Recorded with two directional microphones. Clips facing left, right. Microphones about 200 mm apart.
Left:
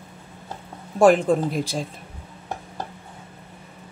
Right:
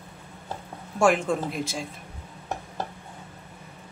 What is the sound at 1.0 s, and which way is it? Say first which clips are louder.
Speech: left 6 dB; 35° left (ahead or behind).